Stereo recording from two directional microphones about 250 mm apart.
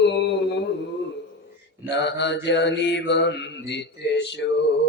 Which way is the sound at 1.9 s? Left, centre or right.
Left.